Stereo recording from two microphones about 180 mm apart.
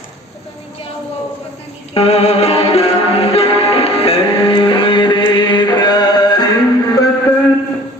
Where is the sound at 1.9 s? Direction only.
35° left (ahead or behind).